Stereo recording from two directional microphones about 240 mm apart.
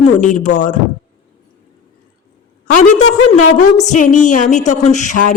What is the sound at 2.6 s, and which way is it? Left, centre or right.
Speech, left.